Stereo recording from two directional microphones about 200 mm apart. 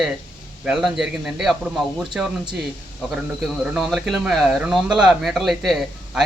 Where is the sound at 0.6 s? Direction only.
Centre (ahead or behind).